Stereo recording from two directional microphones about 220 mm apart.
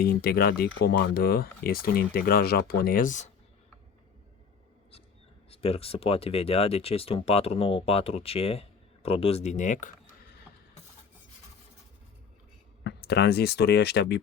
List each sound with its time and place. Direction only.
0.0 s speech: 45° left (ahead or behind)
5.5 s speech: 25° left (ahead or behind)
12.8 s speech: 50° left (ahead or behind)